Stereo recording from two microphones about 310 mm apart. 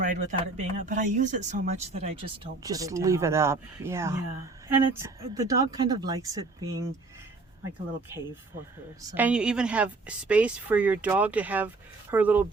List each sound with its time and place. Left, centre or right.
0.0 s speech: right
9.1 s a woman's voice: centre